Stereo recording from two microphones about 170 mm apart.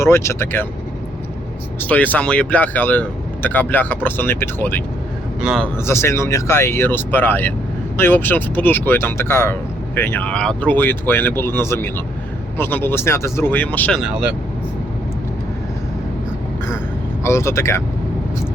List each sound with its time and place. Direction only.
0.0 s speech: 15° left (ahead or behind)
1.8 s speech: 10° left (ahead or behind)
5.4 s speech: 5° right (ahead or behind)
5.8 s speech: 15° left (ahead or behind)
14.0 s speech: 5° right (ahead or behind)
17.2 s speech: 15° left (ahead or behind)